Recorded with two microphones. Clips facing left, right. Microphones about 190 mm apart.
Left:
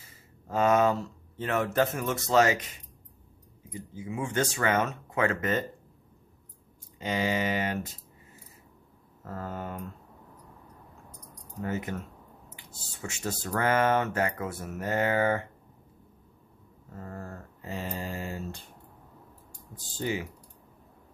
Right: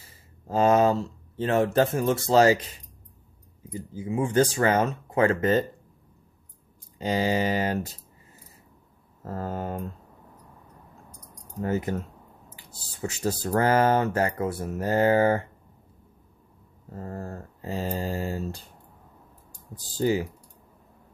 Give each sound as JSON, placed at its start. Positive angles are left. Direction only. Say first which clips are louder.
{"t": 0.5, "sound": "speech", "louder": "right 3 dB", "side_deg": -30}
{"t": 7.0, "sound": "speech", "louder": "right 4 dB", "side_deg": -35}
{"t": 9.2, "sound": "speech", "louder": "right 5 dB", "side_deg": -35}
{"t": 11.6, "sound": "speech", "louder": "right 6 dB", "side_deg": -35}
{"t": 16.9, "sound": "speech", "louder": "right 5 dB", "side_deg": -35}
{"t": 19.8, "sound": "speech", "louder": "right 7 dB", "side_deg": -35}